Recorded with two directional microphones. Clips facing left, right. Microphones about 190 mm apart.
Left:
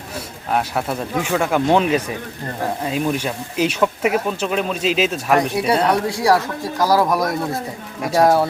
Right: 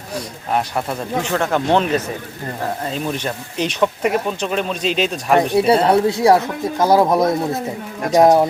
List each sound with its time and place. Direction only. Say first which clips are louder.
0.5 s speech: even; 5° left (ahead or behind)
5.5 s speech: right 4 dB; 25° right (ahead or behind)